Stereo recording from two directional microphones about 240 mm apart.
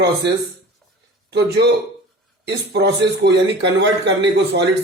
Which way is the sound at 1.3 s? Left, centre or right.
Right.